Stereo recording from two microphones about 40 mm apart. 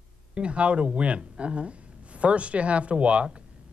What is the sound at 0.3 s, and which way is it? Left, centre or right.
Speech, right.